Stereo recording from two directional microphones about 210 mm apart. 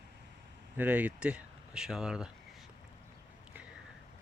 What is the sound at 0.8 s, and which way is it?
Speech, 5° right (ahead or behind).